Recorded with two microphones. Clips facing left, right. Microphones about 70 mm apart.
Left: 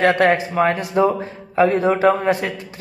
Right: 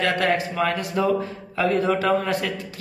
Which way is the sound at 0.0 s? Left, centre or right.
Left.